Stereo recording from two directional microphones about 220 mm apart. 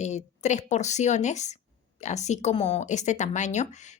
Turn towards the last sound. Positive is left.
turn(degrees=30)  # may be behind; listen again after turning